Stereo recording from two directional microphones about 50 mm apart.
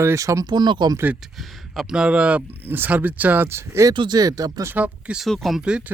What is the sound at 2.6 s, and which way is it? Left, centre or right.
Speech, right.